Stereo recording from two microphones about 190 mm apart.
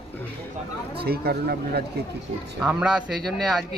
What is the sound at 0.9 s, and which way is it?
Speech, 55° right (ahead or behind).